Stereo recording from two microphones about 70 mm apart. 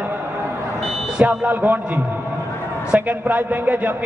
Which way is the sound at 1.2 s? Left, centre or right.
Right.